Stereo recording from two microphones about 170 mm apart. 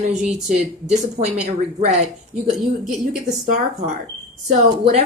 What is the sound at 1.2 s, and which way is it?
Speech, 40° right (ahead or behind).